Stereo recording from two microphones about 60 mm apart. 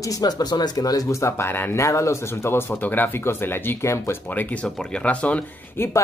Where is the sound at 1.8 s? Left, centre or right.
Left.